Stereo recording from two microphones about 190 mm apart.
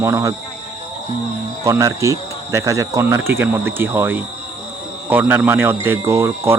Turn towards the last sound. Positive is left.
turn(degrees=-15)  # may be behind; listen again after turning